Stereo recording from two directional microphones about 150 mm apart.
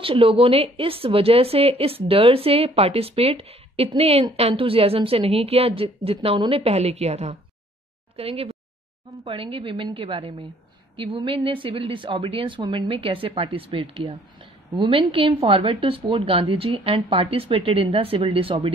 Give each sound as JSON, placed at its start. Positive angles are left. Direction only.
{"t": 0.0, "sound": "a woman's voice", "side_deg": -35}